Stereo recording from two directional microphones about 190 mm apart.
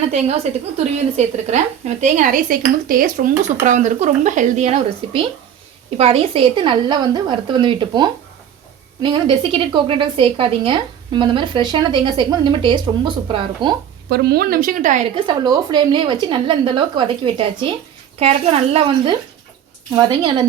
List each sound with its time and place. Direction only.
0.1 s a woman's voice: 35° right (ahead or behind)
14.1 s speech: 55° right (ahead or behind)
15.1 s a woman's voice: 20° right (ahead or behind)